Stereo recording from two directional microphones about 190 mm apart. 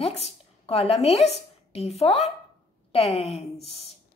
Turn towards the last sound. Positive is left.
turn(degrees=30)  # may be behind; listen again after turning